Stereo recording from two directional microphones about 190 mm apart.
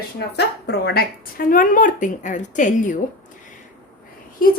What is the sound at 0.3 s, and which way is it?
Speech, 60° left (ahead or behind).